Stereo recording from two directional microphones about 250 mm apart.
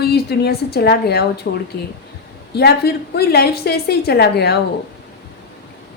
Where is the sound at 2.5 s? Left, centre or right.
Left.